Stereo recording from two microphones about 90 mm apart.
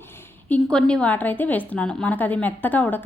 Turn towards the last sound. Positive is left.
turn(degrees=20)  # may be behind; listen again after turning